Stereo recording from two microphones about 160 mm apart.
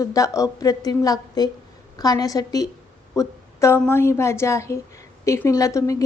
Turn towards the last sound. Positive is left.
turn(degrees=20)  # may be behind; listen again after turning